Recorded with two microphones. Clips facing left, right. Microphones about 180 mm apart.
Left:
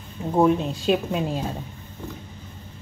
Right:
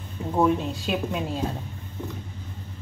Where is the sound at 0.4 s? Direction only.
20° left (ahead or behind).